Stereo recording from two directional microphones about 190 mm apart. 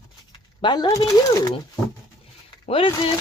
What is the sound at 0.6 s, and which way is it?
Speech, 20° left (ahead or behind).